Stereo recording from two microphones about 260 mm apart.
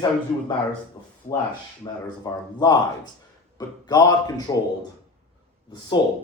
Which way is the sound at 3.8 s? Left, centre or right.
Centre.